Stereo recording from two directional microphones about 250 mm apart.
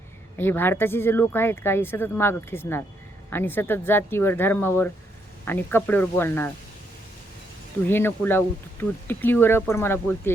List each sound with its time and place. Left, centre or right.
0.3 s speech: centre
7.9 s speech: centre